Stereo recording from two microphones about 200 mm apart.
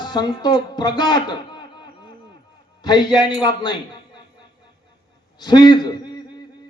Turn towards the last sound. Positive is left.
turn(degrees=20)  # may be behind; listen again after turning